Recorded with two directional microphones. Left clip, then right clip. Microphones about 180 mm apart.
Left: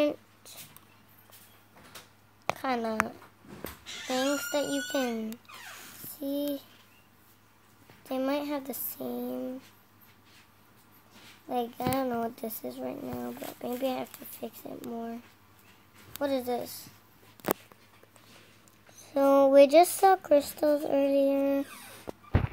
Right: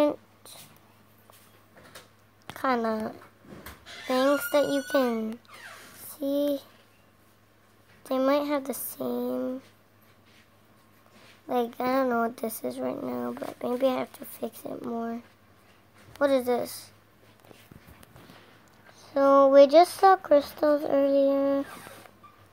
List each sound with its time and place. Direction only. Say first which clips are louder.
0.0 s a sound: right 3 dB; 5° right (ahead or behind)
2.5 s a woman's voice: right 3 dB; 15° right (ahead or behind)
8.0 s speech: right 6 dB; 20° right (ahead or behind)
11.4 s a woman's voice: right 4 dB; 20° right (ahead or behind)
16.2 s speech: right 6 dB; 20° right (ahead or behind)
19.0 s speech: right 3 dB; 10° left (ahead or behind)